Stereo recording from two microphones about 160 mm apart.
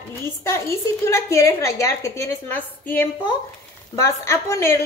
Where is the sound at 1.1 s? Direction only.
15° left (ahead or behind).